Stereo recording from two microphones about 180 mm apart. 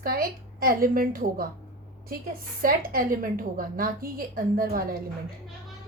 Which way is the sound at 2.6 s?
50° right (ahead or behind).